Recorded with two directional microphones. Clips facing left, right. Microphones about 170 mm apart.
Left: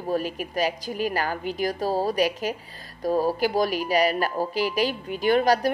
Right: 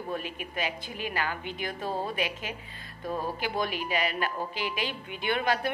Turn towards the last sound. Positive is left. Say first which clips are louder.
# left 8 dB
turn(degrees=40)  # may be behind; listen again after turning